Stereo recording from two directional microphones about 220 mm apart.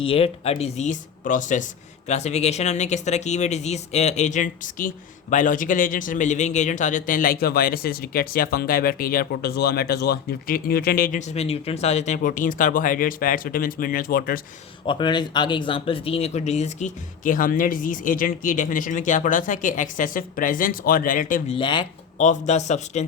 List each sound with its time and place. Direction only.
0.0 s speech: 25° left (ahead or behind); by 14.4 s 40° left (ahead or behind)
14.8 s speech: 20° left (ahead or behind); by 21.4 s 40° left (ahead or behind)
21.6 s speech: 20° left (ahead or behind)
22.3 s speech: 30° left (ahead or behind)